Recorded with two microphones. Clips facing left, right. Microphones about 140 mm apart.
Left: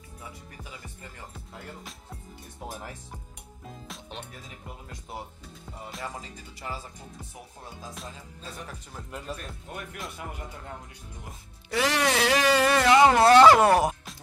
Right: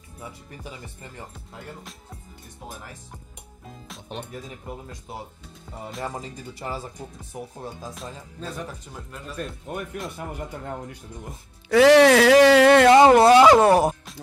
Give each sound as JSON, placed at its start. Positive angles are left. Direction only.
{"t": 1.3, "sound": "music", "side_deg": 0}
{"t": 5.7, "sound": "music", "side_deg": 0}
{"t": 6.0, "sound": "music", "side_deg": -35}
{"t": 7.7, "sound": "music", "side_deg": 0}
{"t": 11.8, "sound": "speech", "side_deg": -90}
{"t": 13.1, "sound": "speech", "side_deg": -15}
{"t": 13.6, "sound": "speech", "side_deg": -30}